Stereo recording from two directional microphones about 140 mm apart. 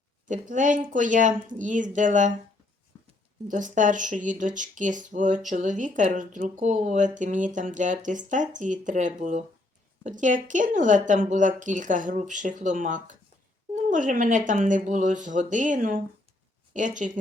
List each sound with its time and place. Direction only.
0.3 s speech: 65° right (ahead or behind)
2.9 s a sound: 25° left (ahead or behind)
3.5 s speech: 65° right (ahead or behind)